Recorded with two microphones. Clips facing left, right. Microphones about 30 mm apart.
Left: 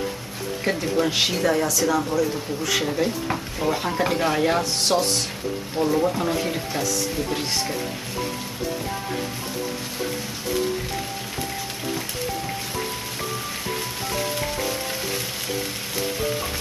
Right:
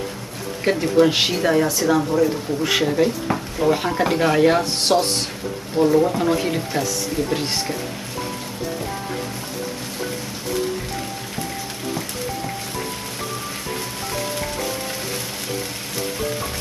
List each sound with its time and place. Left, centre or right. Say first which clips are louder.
0.7 s speech: right 7 dB; centre
1.7 s a man's voice: right 3 dB; right
2.8 s speech: right 5 dB; centre